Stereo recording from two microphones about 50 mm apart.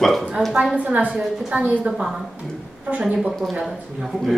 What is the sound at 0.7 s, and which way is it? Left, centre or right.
A woman's voice, right.